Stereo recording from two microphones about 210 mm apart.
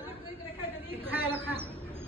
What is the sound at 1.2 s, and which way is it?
Speech, 10° right (ahead or behind).